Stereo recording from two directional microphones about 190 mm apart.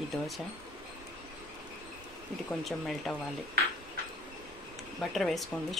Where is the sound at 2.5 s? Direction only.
Centre (ahead or behind).